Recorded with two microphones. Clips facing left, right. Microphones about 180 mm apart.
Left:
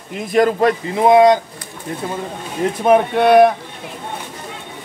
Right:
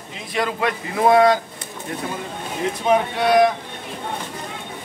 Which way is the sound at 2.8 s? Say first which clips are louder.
Left 6 dB; 55° left (ahead or behind).